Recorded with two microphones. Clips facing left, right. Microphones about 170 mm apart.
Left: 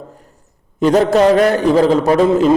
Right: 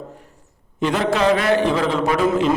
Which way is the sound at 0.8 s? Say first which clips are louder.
Left 8 dB; 40° left (ahead or behind).